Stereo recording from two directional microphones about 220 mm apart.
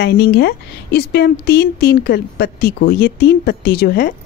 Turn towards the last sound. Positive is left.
turn(degrees=45)  # may be behind; listen again after turning